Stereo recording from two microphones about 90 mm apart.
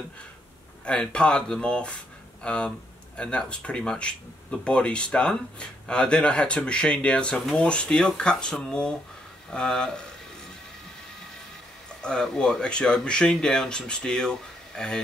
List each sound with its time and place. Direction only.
0.8 s speech: 10° left (ahead or behind)
12.0 s speech: 10° left (ahead or behind)